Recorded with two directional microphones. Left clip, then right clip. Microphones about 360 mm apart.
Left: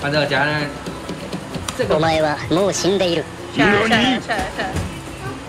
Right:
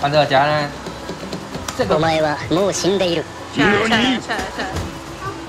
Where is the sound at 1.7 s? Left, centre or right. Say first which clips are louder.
Even; centre.